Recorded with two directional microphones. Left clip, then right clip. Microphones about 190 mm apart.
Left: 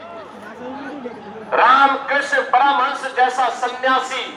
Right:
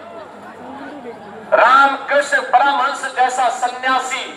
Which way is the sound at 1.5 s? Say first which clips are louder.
Right 2 dB; 20° right (ahead or behind).